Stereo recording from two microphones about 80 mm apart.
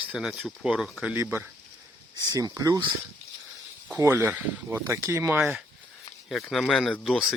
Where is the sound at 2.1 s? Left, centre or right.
Right.